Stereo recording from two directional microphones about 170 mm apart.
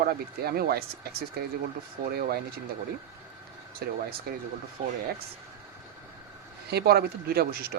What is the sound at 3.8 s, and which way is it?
Speech, 70° right (ahead or behind).